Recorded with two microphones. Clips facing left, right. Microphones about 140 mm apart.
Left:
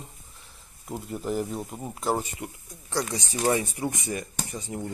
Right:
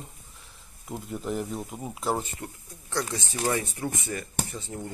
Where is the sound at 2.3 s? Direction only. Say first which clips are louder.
Left 2 dB; 15° left (ahead or behind).